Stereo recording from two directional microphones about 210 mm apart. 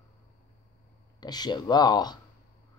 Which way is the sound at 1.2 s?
20° left (ahead or behind).